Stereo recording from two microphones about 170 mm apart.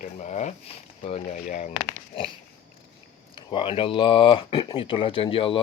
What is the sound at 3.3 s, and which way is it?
Speech, 30° left (ahead or behind).